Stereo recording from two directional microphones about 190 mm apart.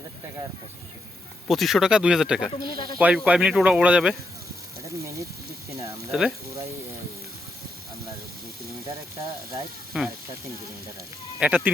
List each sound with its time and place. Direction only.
1.5 s speech: centre (ahead or behind)
2.6 s speech: 25° left (ahead or behind)
3.0 s speech: 5° right (ahead or behind)
6.1 s speech: centre (ahead or behind)
9.9 s speech: 5° right (ahead or behind)
11.3 s speech: 5° right (ahead or behind)